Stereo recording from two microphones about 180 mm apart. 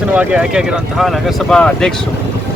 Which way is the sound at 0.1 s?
5° right (ahead or behind).